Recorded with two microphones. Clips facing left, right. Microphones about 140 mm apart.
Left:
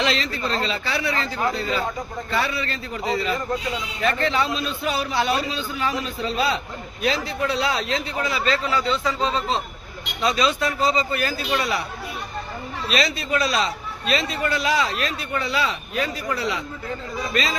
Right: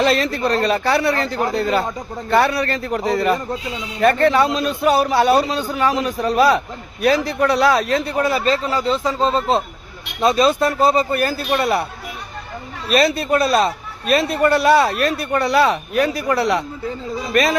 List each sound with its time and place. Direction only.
0.0 s a man's voice: 65° right (ahead or behind)
8.4 s speech: 40° right (ahead or behind)
12.9 s a man's voice: 55° right (ahead or behind)
17.3 s speech: 55° right (ahead or behind)